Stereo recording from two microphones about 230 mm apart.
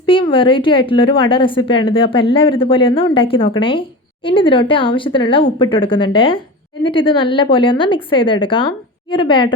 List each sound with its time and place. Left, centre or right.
0.0 s a woman's voice: left